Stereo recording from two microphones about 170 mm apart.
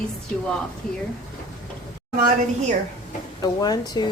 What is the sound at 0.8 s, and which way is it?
Speech, 5° left (ahead or behind).